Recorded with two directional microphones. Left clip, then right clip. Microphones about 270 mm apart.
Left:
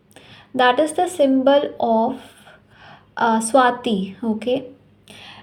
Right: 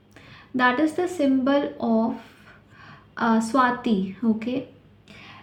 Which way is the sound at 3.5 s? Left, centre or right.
Left.